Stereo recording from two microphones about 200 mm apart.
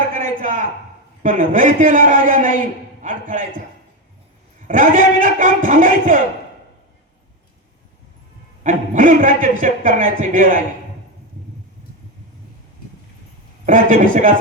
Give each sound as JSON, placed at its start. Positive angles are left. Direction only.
{"t": 0.1, "sound": "a sound", "side_deg": -40}
{"t": 1.2, "sound": "a man's voice", "side_deg": -40}
{"t": 4.7, "sound": "a man's voice", "side_deg": -40}
{"t": 8.6, "sound": "a man's voice", "side_deg": -40}
{"t": 13.7, "sound": "a man's voice", "side_deg": -40}